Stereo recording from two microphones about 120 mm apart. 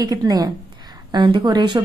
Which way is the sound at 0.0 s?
30° right (ahead or behind).